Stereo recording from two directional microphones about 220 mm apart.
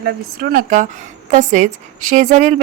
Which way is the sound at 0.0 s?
40° right (ahead or behind).